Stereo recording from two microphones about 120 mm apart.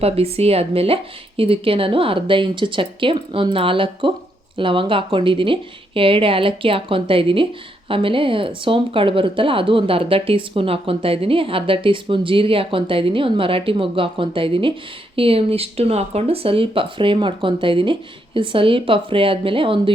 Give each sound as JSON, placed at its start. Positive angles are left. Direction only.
{"t": 0.0, "sound": "a woman's voice", "side_deg": -55}